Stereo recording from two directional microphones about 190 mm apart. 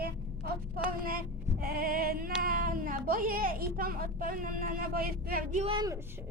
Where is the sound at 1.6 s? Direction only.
50° right (ahead or behind).